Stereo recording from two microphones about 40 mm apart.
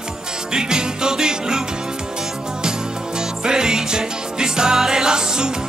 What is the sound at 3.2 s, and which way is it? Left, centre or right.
Music, centre.